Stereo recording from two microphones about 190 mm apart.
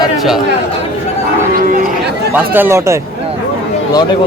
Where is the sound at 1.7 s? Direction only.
50° right (ahead or behind).